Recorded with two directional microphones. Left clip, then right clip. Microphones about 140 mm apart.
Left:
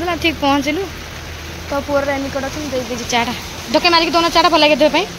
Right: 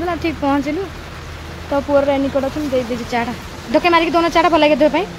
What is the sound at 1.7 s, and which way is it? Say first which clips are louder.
Speech: right 2 dB; 40° right (ahead or behind).